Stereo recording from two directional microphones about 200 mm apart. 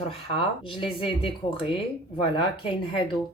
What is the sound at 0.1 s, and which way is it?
Speech, 25° left (ahead or behind).